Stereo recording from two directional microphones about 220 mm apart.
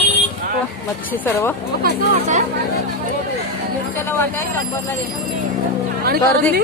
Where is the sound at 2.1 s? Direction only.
35° right (ahead or behind).